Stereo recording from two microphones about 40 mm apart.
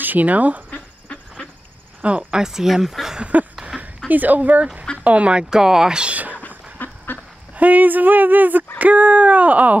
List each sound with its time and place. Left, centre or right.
0.0 s speech: right
2.3 s speech: centre
4.1 s speech: right
5.4 s speech: centre
6.0 s a sound: right
6.4 s a sound: left
7.1 s duck: left
7.5 s speech: right
8.7 s speech: right